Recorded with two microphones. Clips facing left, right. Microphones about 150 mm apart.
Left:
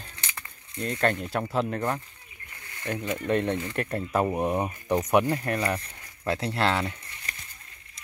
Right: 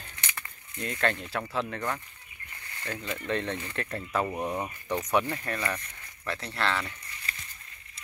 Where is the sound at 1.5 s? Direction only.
30° left (ahead or behind).